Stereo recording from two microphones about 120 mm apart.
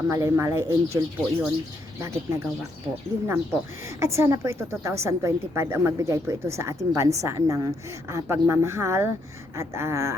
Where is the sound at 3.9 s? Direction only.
25° right (ahead or behind).